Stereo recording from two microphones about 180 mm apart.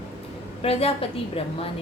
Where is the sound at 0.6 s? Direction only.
30° left (ahead or behind).